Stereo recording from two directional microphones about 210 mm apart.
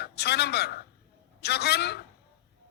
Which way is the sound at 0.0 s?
50° left (ahead or behind).